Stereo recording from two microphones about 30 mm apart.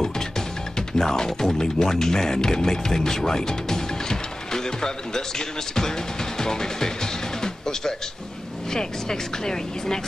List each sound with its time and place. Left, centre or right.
0.7 s speech: centre